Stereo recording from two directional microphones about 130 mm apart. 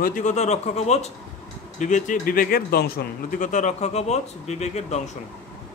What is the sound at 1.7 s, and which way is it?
Speech, 70° left (ahead or behind).